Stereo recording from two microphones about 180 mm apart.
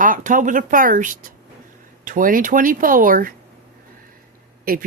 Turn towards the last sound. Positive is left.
turn(degrees=-55)  # may be behind; listen again after turning